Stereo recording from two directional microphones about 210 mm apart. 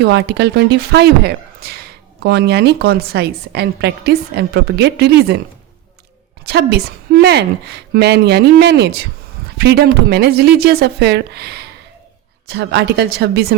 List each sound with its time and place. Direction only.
0.0 s speech: 55° right (ahead or behind)
6.4 s speech: 50° right (ahead or behind)